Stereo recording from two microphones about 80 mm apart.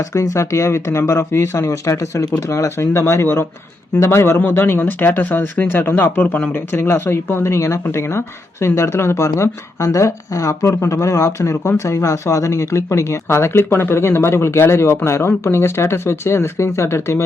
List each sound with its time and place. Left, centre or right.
0.1 s speech: left